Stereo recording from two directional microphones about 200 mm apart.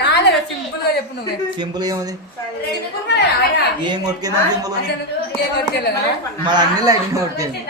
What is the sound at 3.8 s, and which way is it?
Speech, 20° right (ahead or behind).